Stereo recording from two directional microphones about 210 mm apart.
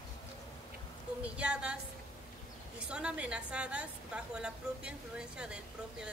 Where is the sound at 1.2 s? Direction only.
5° right (ahead or behind).